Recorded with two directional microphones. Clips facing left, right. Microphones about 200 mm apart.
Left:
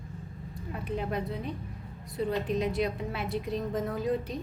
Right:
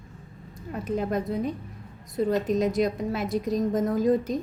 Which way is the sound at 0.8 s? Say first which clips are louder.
Right 5 dB; 45° right (ahead or behind).